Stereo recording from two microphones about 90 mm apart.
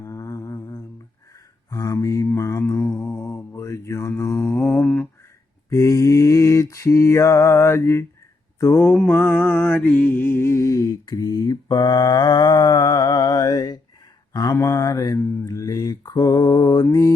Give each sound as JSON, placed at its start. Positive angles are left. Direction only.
{"t": 0.0, "sound": "mantra", "side_deg": 35}
{"t": 5.7, "sound": "mantra", "side_deg": 35}
{"t": 9.0, "sound": "mantra", "side_deg": 15}
{"t": 14.5, "sound": "mantra", "side_deg": 35}